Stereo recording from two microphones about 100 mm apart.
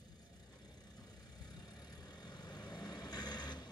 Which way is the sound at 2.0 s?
45° left (ahead or behind).